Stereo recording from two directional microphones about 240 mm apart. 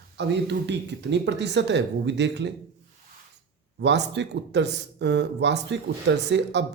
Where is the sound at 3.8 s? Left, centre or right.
Right.